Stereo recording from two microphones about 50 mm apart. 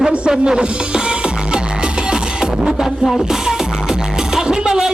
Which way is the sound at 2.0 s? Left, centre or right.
Centre.